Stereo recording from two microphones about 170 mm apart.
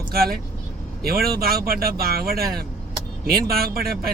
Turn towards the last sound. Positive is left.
turn(degrees=-65)  # may be behind; listen again after turning